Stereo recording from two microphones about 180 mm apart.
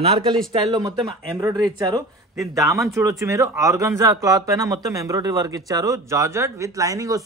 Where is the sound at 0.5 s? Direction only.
25° right (ahead or behind).